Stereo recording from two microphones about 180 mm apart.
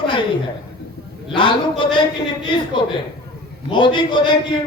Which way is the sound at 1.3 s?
25° left (ahead or behind).